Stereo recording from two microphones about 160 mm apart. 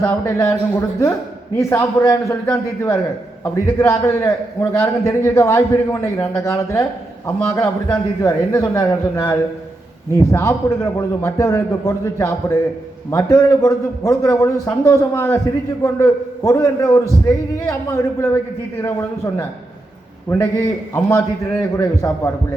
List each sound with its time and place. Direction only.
0.0 s a man's voice: 15° left (ahead or behind)
20.9 s a man's voice: 20° left (ahead or behind)